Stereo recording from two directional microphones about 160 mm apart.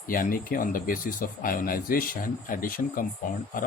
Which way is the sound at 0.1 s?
60° left (ahead or behind).